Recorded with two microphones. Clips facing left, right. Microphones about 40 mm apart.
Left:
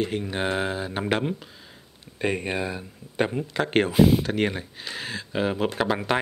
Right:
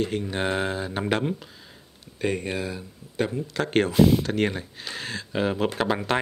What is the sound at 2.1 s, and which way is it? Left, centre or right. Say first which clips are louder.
Speech: left 1 dB; centre.